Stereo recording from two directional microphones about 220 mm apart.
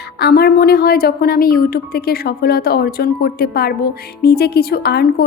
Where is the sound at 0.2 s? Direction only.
45° left (ahead or behind).